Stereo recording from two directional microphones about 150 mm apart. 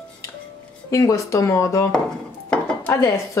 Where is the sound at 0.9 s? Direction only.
20° left (ahead or behind).